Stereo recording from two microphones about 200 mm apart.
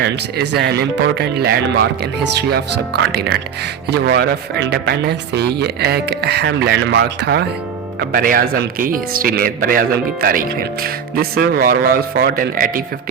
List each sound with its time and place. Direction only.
0.0 s speech: 55° right (ahead or behind)
8.1 s speech: 45° right (ahead or behind)